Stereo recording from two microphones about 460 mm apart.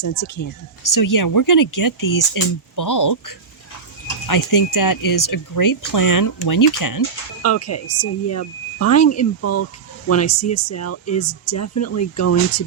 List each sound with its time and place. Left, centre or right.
0.0 s speech: left
4.3 s speech: left
7.4 s speech: left